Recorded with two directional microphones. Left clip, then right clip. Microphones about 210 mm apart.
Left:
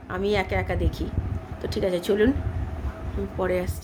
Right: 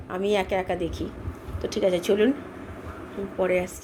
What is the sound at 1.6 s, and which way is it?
Speech, 35° left (ahead or behind).